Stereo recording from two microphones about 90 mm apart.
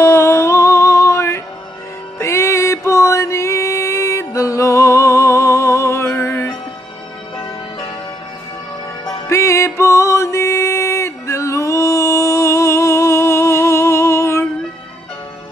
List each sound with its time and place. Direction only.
0.0 s music: 30° left (ahead or behind)
9.3 s music: 30° left (ahead or behind)